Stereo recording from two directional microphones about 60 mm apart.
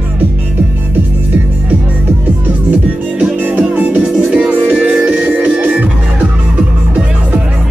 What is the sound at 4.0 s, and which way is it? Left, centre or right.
Music, centre.